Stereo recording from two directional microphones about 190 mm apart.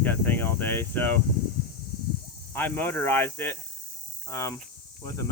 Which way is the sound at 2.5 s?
10° left (ahead or behind).